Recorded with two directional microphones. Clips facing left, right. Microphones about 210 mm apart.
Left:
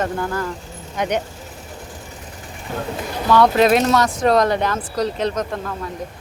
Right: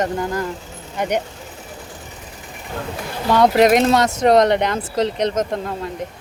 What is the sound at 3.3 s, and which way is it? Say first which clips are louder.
Speech: right 1 dB; 20° right (ahead or behind).